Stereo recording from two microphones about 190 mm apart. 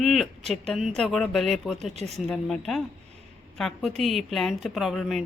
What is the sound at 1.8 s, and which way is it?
Speech, 35° right (ahead or behind).